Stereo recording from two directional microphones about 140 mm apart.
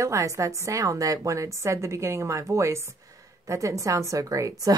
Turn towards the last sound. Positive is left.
turn(degrees=-25)  # may be behind; listen again after turning